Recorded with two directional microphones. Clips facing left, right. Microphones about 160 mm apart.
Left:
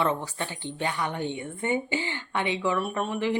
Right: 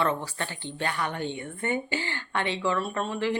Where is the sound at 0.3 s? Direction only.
15° left (ahead or behind).